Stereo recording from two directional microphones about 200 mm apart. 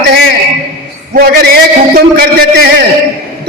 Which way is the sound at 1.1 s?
50° right (ahead or behind).